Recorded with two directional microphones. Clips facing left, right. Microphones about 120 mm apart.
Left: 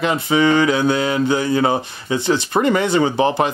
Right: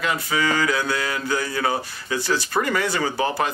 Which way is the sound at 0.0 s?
25° left (ahead or behind).